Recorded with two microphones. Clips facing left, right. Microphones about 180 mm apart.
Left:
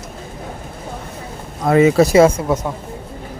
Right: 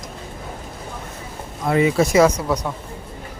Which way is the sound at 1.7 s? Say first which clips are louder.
Left 5 dB; 45° left (ahead or behind).